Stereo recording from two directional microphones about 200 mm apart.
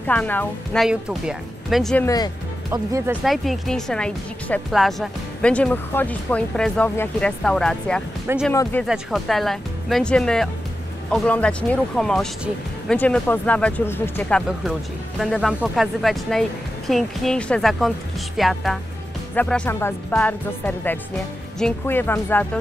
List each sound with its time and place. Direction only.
0.0 s speech: 5° left (ahead or behind)
0.8 s speech: 5° right (ahead or behind)
2.0 s speech: 20° left (ahead or behind)
2.7 s speech: 15° right (ahead or behind)
3.3 s speech: centre (ahead or behind)